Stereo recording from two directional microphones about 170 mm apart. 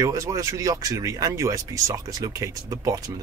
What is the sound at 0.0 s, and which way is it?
Speech, 20° right (ahead or behind).